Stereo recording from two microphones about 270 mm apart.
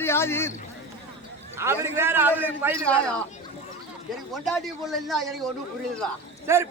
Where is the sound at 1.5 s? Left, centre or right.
Centre.